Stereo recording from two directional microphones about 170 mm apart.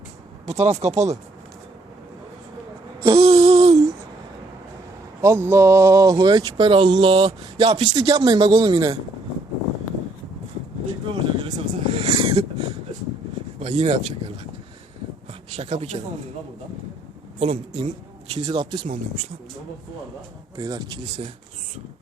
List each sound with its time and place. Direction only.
0.4 s speech: 40° right (ahead or behind)
3.0 s a sound: 35° right (ahead or behind)
5.2 s speech: 15° right (ahead or behind)
11.1 s speech: 30° right (ahead or behind)
17.4 s speech: 35° right (ahead or behind)
20.6 s speech: 25° right (ahead or behind)